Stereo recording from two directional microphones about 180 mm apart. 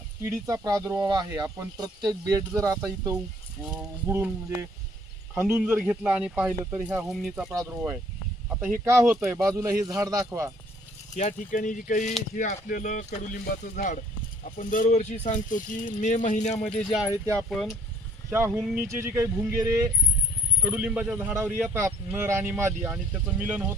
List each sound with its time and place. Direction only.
0.2 s speech: 15° right (ahead or behind)
8.8 s speech: 15° right (ahead or behind)
11.1 s speech: 40° left (ahead or behind)
16.6 s speech: 5° left (ahead or behind)
17.0 s speech: 15° right (ahead or behind)
17.3 s speech: centre (ahead or behind)
18.3 s speech: 15° right (ahead or behind)